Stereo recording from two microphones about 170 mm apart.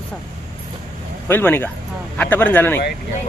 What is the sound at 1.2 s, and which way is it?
Speech, 10° left (ahead or behind).